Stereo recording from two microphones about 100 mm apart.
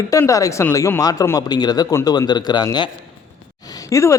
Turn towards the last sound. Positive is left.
turn(degrees=30)  # may be behind; listen again after turning